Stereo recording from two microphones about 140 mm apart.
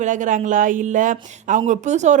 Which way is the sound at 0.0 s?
65° right (ahead or behind).